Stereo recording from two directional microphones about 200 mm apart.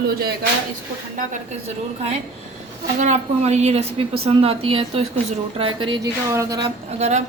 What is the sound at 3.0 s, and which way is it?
A woman's voice, 35° right (ahead or behind).